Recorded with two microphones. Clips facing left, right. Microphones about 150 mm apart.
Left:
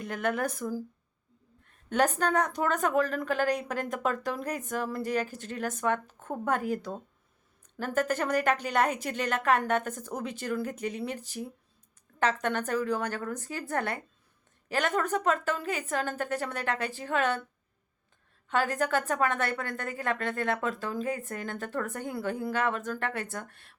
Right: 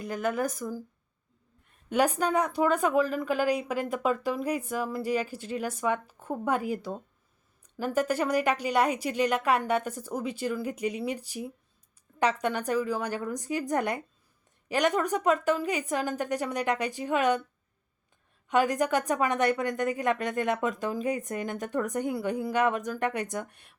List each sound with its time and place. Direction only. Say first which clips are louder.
0.0 s speech: right 1 dB; centre (ahead or behind)
1.9 s a woman's voice: right 1 dB; 10° right (ahead or behind)
18.4 s a woman's voice: right 3 dB; 15° right (ahead or behind)